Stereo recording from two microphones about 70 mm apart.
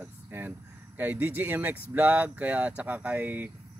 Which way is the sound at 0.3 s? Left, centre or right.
Right.